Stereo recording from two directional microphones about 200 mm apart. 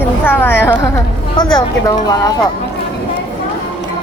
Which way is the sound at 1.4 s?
20° left (ahead or behind).